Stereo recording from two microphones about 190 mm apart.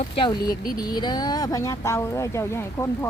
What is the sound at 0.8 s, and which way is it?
Speech, 20° left (ahead or behind).